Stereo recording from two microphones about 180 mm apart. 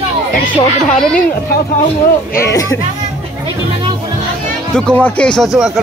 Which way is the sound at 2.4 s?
20° left (ahead or behind).